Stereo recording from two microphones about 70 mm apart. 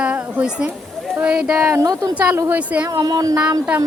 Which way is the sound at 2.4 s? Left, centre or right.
Right.